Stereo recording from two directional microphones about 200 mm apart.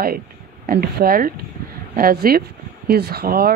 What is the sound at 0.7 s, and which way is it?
A woman's voice, 50° right (ahead or behind).